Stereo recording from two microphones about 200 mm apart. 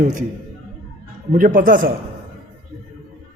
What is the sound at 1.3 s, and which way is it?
Speech, 40° right (ahead or behind).